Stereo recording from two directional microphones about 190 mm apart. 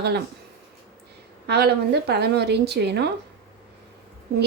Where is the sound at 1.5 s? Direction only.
60° right (ahead or behind).